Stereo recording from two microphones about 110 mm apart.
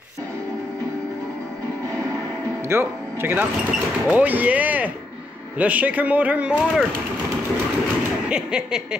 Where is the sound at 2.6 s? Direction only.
20° right (ahead or behind).